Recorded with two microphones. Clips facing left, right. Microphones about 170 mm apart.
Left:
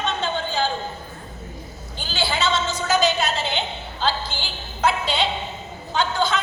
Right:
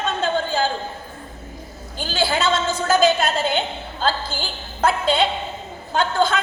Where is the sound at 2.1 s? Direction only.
50° right (ahead or behind).